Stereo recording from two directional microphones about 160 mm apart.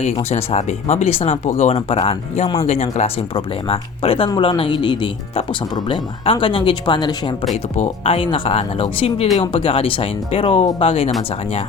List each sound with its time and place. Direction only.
0.0 s speech: 40° left (ahead or behind)
7.5 s speech: 40° left (ahead or behind)